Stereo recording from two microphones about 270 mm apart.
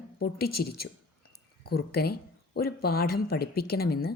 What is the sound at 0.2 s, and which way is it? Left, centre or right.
Speech, left.